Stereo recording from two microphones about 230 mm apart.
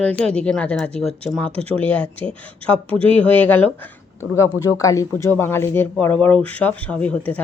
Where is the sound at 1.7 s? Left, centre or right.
Centre.